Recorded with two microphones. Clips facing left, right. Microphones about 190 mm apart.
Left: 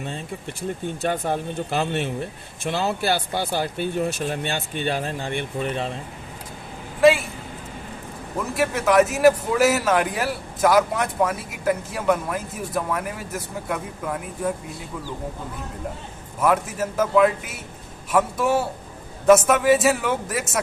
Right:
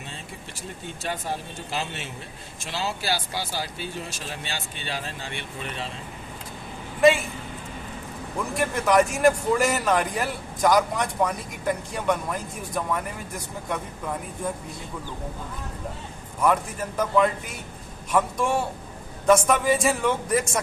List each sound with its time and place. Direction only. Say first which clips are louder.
0.9 s speech: left 6 dB; 55° left (ahead or behind)
7.0 s a woman's voice: left 2 dB; centre (ahead or behind)
8.5 s a man's voice: left 3 dB; 5° left (ahead or behind)
16.4 s a man's voice: left 2 dB; 5° left (ahead or behind)